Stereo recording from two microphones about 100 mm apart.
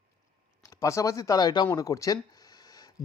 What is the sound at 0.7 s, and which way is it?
Speech, 30° left (ahead or behind).